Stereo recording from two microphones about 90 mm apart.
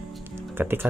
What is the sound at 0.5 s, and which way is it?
Speech, 25° right (ahead or behind).